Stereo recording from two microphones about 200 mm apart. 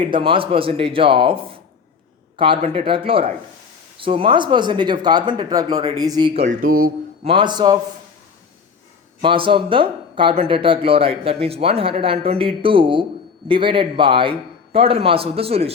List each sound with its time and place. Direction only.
0.0 s speech: 25° right (ahead or behind)
6.4 s speech: 45° right (ahead or behind)
7.3 s speech: 25° right (ahead or behind)
9.2 s speech: 25° right (ahead or behind)